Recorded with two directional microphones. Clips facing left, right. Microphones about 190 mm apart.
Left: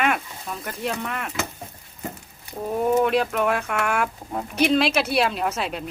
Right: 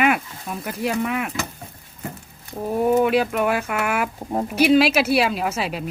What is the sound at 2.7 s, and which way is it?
Speech, 5° right (ahead or behind).